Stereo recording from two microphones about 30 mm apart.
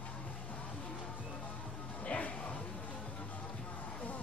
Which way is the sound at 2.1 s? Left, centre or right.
Left.